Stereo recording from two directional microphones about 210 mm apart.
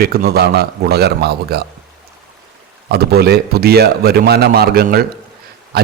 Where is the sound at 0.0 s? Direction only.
45° right (ahead or behind).